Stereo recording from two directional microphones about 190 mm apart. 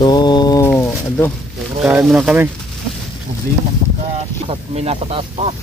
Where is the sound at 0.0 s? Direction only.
20° left (ahead or behind).